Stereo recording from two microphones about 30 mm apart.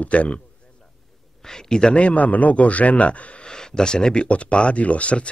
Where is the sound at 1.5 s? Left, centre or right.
Left.